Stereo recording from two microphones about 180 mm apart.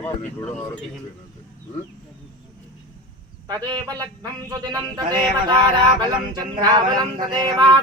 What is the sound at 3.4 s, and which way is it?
A man's voice, 20° right (ahead or behind).